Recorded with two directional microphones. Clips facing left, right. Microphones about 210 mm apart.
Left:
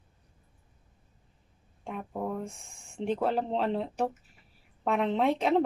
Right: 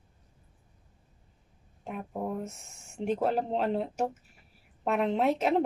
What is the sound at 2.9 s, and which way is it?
Speech, 5° right (ahead or behind).